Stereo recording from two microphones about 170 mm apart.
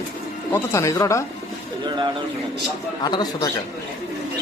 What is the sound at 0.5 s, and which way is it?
Speech, 15° left (ahead or behind).